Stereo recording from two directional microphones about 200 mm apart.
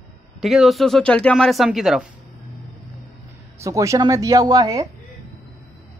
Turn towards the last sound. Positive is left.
turn(degrees=-20)  # may be behind; listen again after turning